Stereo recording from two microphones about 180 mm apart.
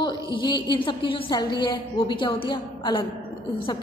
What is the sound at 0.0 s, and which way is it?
A woman's voice, 25° left (ahead or behind).